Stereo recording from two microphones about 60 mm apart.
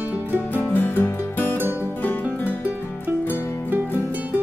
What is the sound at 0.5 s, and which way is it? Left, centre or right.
Music, left.